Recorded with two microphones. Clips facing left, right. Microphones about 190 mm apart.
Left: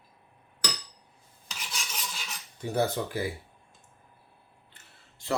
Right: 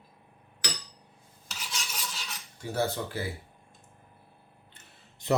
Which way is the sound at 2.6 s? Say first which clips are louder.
Left 2 dB; 20° left (ahead or behind).